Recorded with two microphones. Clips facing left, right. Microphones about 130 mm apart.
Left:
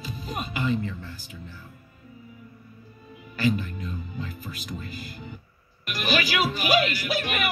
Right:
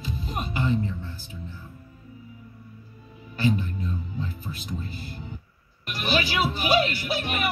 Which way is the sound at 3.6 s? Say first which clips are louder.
Right 3 dB; 90° left.